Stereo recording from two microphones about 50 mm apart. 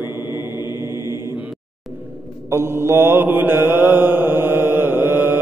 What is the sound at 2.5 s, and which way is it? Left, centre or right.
Mantra, right.